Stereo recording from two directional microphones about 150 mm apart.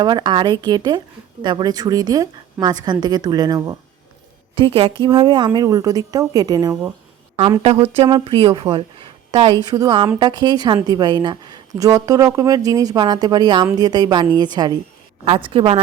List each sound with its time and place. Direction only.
0.0 s speech: 30° right (ahead or behind)
4.5 s a woman's voice: 35° right (ahead or behind)
8.2 s a woman's voice: 35° right (ahead or behind)